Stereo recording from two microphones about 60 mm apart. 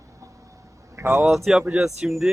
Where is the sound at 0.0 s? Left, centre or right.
Right.